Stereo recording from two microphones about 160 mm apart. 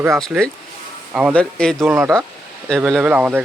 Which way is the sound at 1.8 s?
15° right (ahead or behind).